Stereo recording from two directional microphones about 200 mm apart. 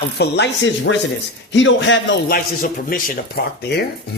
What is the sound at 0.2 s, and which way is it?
Speech, 60° left (ahead or behind).